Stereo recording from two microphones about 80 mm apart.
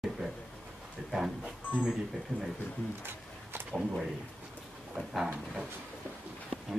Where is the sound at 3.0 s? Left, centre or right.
Right.